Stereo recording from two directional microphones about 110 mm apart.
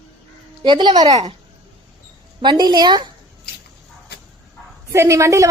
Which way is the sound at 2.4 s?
40° right (ahead or behind).